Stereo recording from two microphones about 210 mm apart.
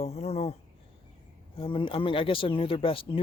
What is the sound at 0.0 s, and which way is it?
Speech, 30° left (ahead or behind).